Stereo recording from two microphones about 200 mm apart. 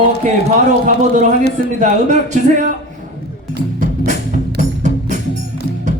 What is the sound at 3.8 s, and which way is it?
Music, 40° right (ahead or behind).